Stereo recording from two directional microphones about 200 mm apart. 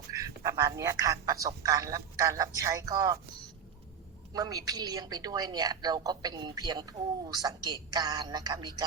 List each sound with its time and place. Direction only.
0.1 s a man's voice: 15° right (ahead or behind)
4.4 s a woman's voice: 15° right (ahead or behind)